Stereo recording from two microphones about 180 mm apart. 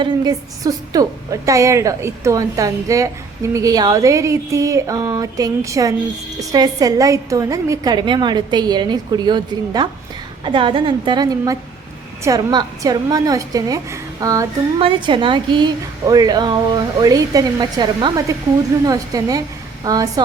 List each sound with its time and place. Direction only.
0.0 s a woman's voice: 20° right (ahead or behind)
14.8 s a woman's voice: 30° right (ahead or behind)